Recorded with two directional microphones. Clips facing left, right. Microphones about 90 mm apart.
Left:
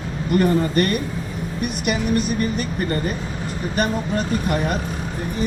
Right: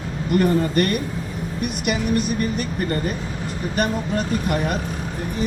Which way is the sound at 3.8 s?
35° left (ahead or behind).